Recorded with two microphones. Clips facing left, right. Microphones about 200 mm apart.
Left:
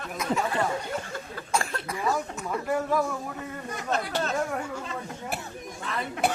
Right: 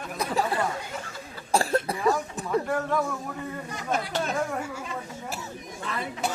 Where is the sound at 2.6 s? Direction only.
5° left (ahead or behind).